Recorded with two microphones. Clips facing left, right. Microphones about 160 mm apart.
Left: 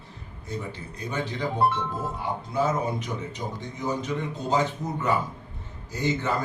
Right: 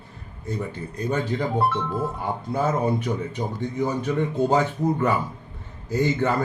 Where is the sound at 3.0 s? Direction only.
55° right (ahead or behind).